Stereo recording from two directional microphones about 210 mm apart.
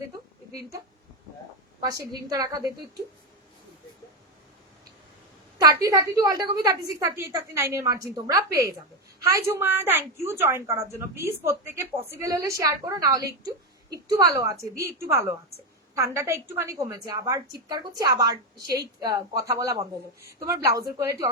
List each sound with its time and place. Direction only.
1.8 s a woman's voice: 15° right (ahead or behind)
5.5 s a woman's voice: 15° right (ahead or behind)